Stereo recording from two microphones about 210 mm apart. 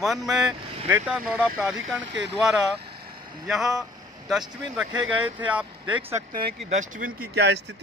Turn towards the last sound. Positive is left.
turn(degrees=-55)  # may be behind; listen again after turning